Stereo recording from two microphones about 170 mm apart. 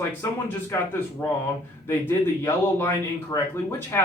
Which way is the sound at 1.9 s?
15° left (ahead or behind).